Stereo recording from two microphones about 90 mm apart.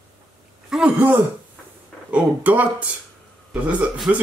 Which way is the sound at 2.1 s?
15° right (ahead or behind).